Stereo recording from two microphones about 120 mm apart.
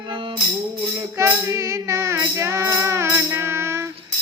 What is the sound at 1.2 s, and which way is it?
Music, 25° right (ahead or behind).